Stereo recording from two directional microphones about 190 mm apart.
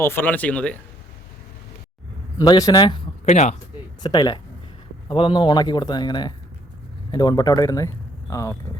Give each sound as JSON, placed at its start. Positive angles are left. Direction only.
{"t": 0.0, "sound": "speech", "side_deg": 10}
{"t": 2.4, "sound": "a man's voice", "side_deg": 20}
{"t": 3.2, "sound": "speech", "side_deg": 35}
{"t": 4.0, "sound": "a man's voice", "side_deg": 20}